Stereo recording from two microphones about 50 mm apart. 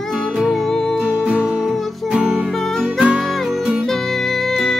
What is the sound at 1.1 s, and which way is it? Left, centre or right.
Music, right.